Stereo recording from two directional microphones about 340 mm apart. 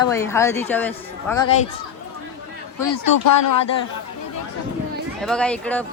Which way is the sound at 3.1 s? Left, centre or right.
Left.